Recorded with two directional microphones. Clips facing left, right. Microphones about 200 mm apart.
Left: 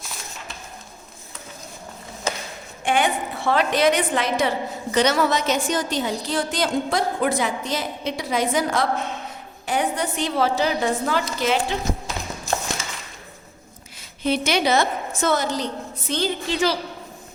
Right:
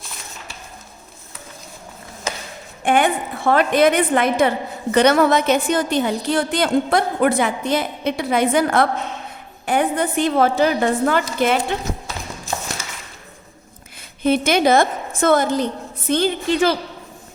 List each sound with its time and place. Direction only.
2.8 s a woman's voice: 55° right (ahead or behind)
14.2 s a woman's voice: 50° right (ahead or behind)